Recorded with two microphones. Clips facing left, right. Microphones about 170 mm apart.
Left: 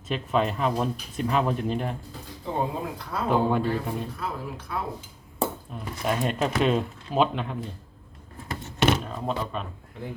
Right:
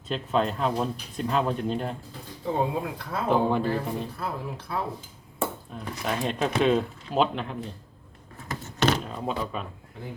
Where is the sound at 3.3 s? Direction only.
5° left (ahead or behind).